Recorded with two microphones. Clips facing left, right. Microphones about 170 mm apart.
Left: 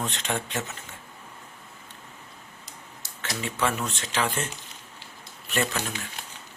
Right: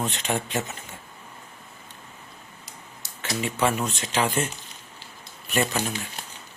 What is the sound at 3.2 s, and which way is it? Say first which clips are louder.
Speech: right 3 dB; 15° right (ahead or behind).